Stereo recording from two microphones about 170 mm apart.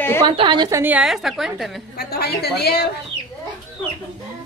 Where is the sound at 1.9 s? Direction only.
70° left (ahead or behind).